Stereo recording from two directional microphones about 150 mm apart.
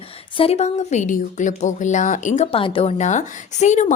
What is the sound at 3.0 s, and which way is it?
Speech, 50° left (ahead or behind).